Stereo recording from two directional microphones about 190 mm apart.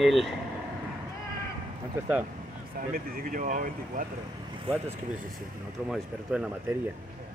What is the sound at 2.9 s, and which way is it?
Speech, 50° right (ahead or behind).